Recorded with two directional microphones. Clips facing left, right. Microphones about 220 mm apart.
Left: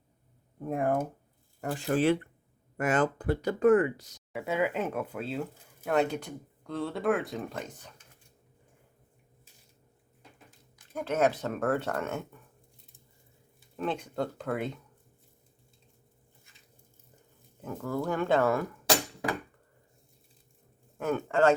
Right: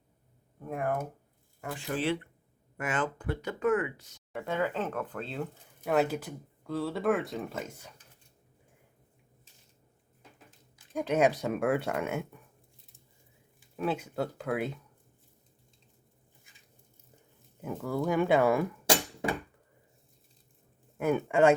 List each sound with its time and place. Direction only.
0.7 s speech: 30° left (ahead or behind)
1.6 s speech: 40° left (ahead or behind)
4.3 s speech: 5° left (ahead or behind)
10.9 s speech: 15° right (ahead or behind)
13.7 s speech: 5° right (ahead or behind)
17.6 s speech: 10° right (ahead or behind); by 19.4 s 25° right (ahead or behind)
21.0 s speech: 15° right (ahead or behind)